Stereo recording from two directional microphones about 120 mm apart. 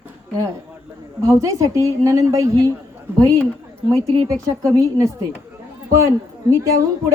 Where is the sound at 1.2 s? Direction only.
25° right (ahead or behind).